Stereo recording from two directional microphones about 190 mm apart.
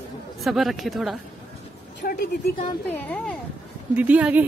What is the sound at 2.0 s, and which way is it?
Speech, 50° left (ahead or behind).